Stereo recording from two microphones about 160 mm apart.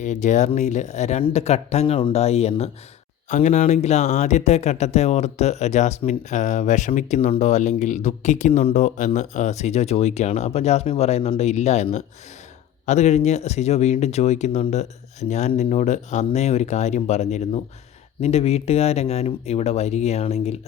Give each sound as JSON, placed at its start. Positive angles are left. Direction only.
{"t": 0.0, "sound": "speech", "side_deg": 50}